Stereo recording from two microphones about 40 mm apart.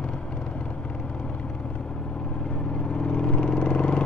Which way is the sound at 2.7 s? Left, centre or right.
Left.